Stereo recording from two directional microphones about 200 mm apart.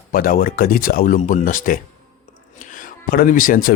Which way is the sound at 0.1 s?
45° left (ahead or behind).